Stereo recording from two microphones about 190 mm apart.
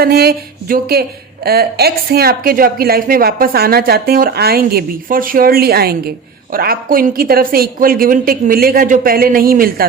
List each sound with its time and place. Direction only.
0.0 s a woman's voice: 55° right (ahead or behind)